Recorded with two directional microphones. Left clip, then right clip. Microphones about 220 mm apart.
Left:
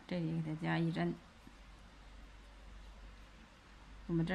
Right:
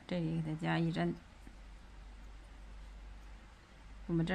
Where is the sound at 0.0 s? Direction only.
15° right (ahead or behind).